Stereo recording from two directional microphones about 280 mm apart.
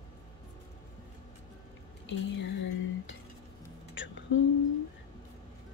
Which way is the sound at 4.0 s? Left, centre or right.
Left.